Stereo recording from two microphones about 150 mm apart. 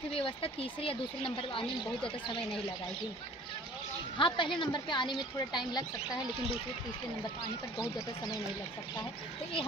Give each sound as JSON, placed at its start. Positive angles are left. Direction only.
{"t": 0.1, "sound": "speech", "side_deg": 40}
{"t": 4.2, "sound": "speech", "side_deg": 35}